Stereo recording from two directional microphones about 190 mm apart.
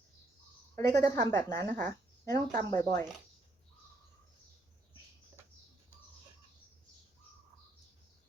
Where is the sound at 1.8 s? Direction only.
15° left (ahead or behind).